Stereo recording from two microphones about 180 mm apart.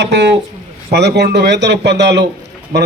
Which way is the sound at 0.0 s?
70° right (ahead or behind).